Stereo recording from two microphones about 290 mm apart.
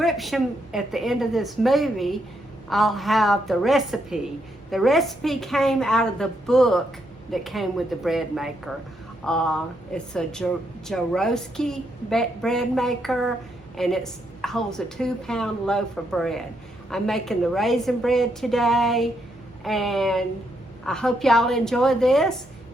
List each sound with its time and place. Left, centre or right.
0.0 s a woman's voice: centre